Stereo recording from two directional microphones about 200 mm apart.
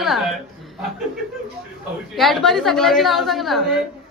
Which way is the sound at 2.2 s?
Centre (ahead or behind).